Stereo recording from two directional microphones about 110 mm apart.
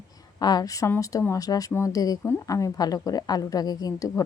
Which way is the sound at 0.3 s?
40° left (ahead or behind).